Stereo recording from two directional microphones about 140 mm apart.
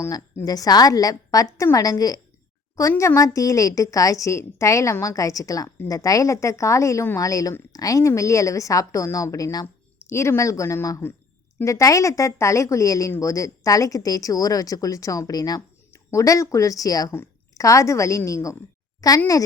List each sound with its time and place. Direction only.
0.0 s a woman's voice: 25° left (ahead or behind)